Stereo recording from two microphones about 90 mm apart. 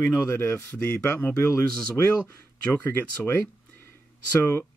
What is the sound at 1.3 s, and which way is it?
Speech, 30° left (ahead or behind).